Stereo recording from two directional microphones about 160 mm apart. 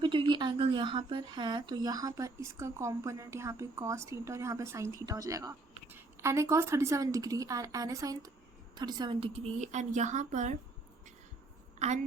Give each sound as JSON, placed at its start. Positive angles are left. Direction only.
{"t": 0.0, "sound": "a woman's voice", "side_deg": -30}